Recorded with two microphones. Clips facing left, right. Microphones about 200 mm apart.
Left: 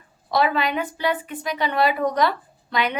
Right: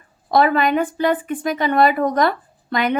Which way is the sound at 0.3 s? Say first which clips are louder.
Right 5 dB; 50° right (ahead or behind).